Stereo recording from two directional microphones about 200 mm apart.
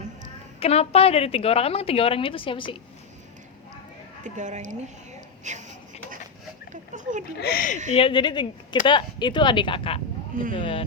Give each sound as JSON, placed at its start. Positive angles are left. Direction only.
{"t": 0.6, "sound": "a woman's voice", "side_deg": 30}
{"t": 4.2, "sound": "speech", "side_deg": -35}
{"t": 6.9, "sound": "a sound", "side_deg": -40}
{"t": 7.3, "sound": "speech", "side_deg": 50}
{"t": 7.9, "sound": "a woman's voice", "side_deg": 25}